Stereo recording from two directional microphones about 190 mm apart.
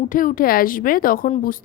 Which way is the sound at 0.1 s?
45° left (ahead or behind).